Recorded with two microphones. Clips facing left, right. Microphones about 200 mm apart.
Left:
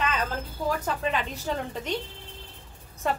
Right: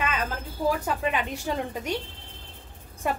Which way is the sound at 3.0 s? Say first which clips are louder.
Even; 10° right (ahead or behind).